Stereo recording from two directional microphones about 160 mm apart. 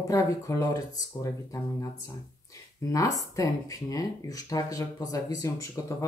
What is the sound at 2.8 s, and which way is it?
Speech, 20° left (ahead or behind).